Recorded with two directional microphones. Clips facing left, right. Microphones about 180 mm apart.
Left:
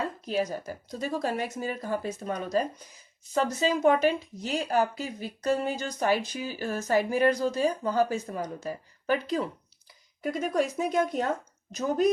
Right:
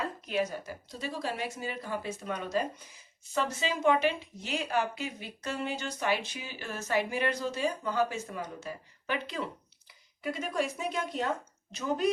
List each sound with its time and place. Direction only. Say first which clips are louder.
0.3 s a woman's voice: left 2 dB; 35° left (ahead or behind)